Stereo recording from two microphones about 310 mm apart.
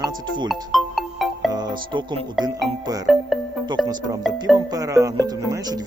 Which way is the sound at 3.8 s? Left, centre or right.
Centre.